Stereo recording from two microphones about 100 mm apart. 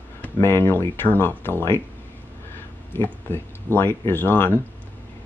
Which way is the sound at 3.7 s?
25° left (ahead or behind).